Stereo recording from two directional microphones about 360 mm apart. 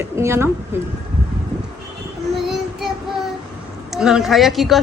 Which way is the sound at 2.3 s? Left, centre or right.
Centre.